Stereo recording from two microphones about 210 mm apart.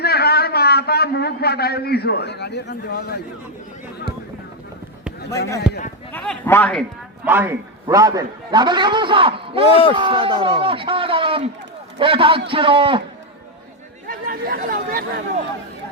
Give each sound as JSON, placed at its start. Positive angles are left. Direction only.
{"t": 0.0, "sound": "a man's voice", "side_deg": 50}
{"t": 5.7, "sound": "speech", "side_deg": -5}
{"t": 6.1, "sound": "a man's voice", "side_deg": 10}
{"t": 7.3, "sound": "a man's voice", "side_deg": -10}
{"t": 14.1, "sound": "speech", "side_deg": -40}